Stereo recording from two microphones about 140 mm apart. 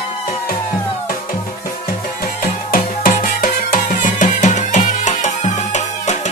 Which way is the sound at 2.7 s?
90° left.